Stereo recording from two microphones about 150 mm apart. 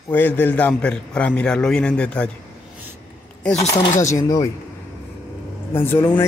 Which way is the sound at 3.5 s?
45° left (ahead or behind).